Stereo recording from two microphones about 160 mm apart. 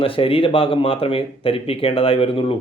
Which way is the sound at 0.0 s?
35° left (ahead or behind).